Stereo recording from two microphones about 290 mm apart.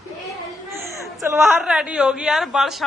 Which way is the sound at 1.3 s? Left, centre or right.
Centre.